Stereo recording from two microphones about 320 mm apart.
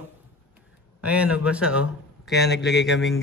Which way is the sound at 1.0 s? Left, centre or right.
Centre.